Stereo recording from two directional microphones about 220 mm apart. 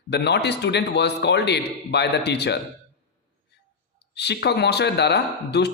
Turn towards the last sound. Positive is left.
turn(degrees=50)  # may be behind; listen again after turning